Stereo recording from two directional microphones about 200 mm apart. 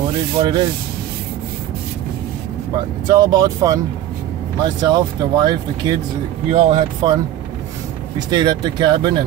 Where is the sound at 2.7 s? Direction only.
20° right (ahead or behind).